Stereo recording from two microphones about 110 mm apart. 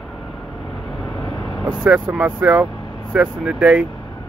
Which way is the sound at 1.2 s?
40° left (ahead or behind).